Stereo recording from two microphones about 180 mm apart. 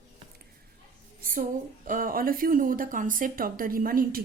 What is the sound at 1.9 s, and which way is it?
A woman's voice, 50° right (ahead or behind).